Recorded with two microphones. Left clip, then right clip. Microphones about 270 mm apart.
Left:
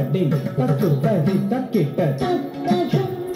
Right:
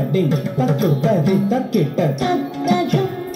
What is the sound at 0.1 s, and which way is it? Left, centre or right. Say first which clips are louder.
Speech: right 3 dB; right.